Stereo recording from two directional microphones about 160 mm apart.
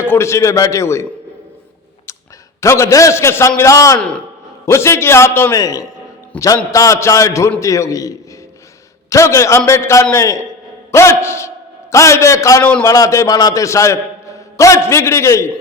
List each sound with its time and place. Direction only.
0.0 s a man's voice: 15° left (ahead or behind)
2.6 s a man's voice: 20° left (ahead or behind)
6.3 s a man's voice: 10° left (ahead or behind)
6.7 s a man's voice: 20° left (ahead or behind)